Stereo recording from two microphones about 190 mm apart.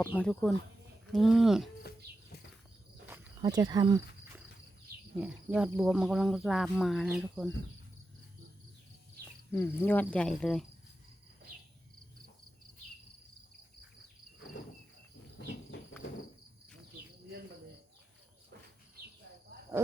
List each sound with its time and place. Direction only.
0.0 s speech: 10° left (ahead or behind)
3.1 s speech: 20° right (ahead or behind)
5.2 s speech: 5° right (ahead or behind)
9.5 s speech: 10° left (ahead or behind)